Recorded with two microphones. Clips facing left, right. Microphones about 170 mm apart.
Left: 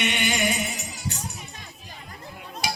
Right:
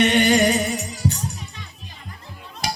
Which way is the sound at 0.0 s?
40° right (ahead or behind).